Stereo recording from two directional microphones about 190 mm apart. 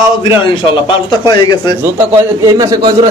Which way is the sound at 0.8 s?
20° left (ahead or behind).